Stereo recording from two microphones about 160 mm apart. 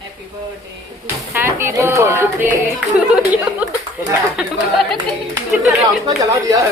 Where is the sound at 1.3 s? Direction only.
15° right (ahead or behind).